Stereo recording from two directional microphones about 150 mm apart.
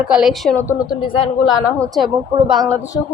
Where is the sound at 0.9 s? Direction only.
35° left (ahead or behind).